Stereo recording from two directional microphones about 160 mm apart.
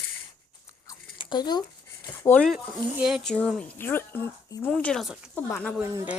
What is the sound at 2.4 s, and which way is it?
Speech, 5° right (ahead or behind).